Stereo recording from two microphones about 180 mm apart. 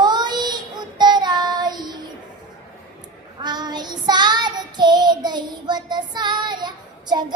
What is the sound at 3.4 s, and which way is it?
Child singing, 25° right (ahead or behind).